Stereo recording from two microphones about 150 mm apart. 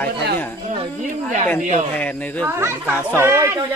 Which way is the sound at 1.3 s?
55° right (ahead or behind).